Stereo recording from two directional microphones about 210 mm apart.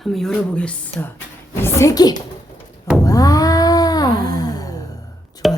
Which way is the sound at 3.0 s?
15° left (ahead or behind).